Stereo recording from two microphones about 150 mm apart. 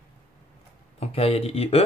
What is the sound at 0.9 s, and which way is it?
Speech, 45° left (ahead or behind).